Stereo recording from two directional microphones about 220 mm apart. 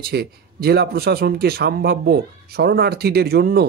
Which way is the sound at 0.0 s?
45° right (ahead or behind).